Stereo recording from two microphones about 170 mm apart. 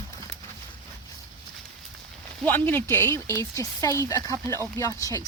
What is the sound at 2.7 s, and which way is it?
Speech, 10° left (ahead or behind).